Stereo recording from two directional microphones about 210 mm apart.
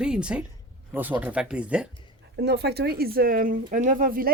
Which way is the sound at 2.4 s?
50° right (ahead or behind).